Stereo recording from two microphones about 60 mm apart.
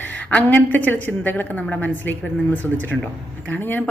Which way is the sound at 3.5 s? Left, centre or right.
Left.